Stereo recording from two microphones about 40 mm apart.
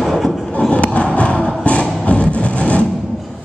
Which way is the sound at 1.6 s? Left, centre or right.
Left.